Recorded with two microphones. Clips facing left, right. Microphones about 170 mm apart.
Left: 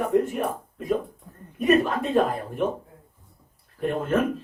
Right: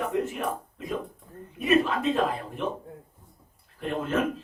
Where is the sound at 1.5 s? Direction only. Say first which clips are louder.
Left 3 dB; 45° left (ahead or behind).